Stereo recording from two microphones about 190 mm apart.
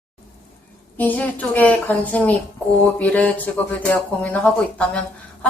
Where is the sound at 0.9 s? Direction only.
10° left (ahead or behind).